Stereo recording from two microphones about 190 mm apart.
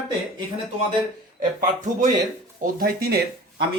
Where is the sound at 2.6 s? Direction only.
50° right (ahead or behind).